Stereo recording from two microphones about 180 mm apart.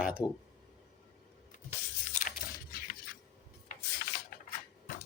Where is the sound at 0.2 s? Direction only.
20° left (ahead or behind).